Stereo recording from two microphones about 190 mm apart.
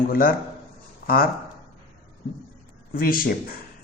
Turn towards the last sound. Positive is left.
turn(degrees=50)  # may be behind; listen again after turning